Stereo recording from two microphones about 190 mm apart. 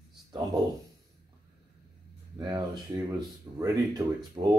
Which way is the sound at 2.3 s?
20° right (ahead or behind).